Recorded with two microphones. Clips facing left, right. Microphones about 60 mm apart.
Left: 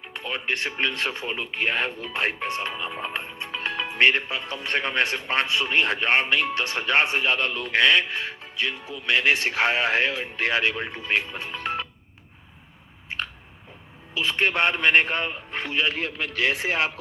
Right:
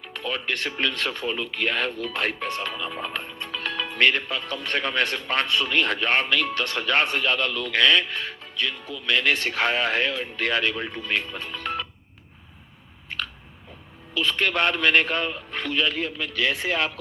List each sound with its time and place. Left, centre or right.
0.3 s a man's voice: left
3.4 s music: left
3.9 s a man's voice: left
14.2 s a man's voice: left
15.8 s a man's voice: left